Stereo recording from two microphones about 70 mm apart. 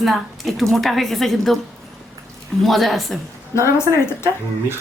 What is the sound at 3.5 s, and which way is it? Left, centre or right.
Speech, left.